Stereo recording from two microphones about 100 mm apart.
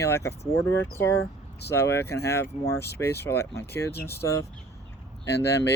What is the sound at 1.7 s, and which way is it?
Speech, 25° left (ahead or behind).